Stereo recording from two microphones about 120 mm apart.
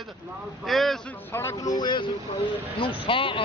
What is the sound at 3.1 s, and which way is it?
Speech, 45° left (ahead or behind).